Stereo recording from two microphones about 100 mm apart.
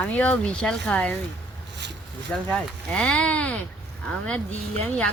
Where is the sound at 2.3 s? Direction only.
10° left (ahead or behind).